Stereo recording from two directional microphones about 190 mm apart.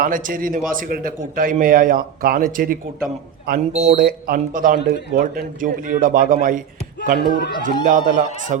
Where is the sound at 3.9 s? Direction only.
50° right (ahead or behind).